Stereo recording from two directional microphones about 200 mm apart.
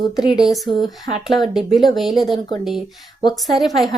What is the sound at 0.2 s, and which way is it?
Speech, centre (ahead or behind).